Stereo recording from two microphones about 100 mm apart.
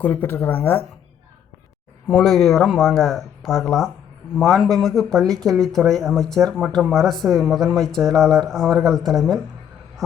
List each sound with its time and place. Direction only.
0.0 s speech: 20° left (ahead or behind)
2.0 s speech: 5° left (ahead or behind)